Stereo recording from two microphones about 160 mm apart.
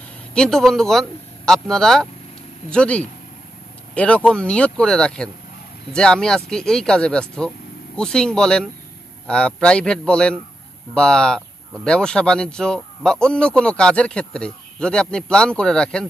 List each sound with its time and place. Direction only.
0.3 s speech: 5° left (ahead or behind)